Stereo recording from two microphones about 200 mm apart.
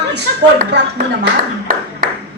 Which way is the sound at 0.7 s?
60° right (ahead or behind).